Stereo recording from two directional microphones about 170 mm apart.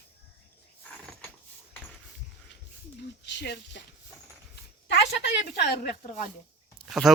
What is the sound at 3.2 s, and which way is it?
Speech, 85° left.